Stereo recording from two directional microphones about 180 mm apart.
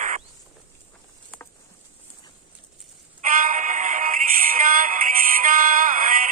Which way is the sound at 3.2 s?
50° right (ahead or behind).